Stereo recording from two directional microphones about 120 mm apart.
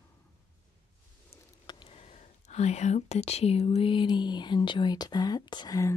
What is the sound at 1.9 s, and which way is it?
Speech, 65° left (ahead or behind).